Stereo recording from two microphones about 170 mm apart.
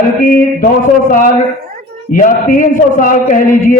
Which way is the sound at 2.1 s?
50° left (ahead or behind).